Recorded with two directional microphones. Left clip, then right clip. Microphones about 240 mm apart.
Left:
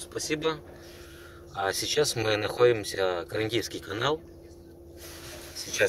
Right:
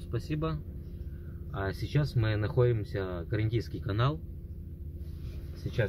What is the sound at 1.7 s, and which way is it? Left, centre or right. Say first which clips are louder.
Speech: left 13 dB; centre.